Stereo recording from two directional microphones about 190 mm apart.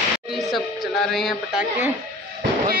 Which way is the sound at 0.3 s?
Centre (ahead or behind).